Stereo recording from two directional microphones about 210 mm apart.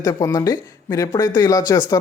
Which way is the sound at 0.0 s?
15° left (ahead or behind).